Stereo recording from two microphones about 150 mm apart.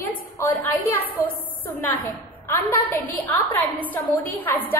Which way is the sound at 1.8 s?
15° left (ahead or behind).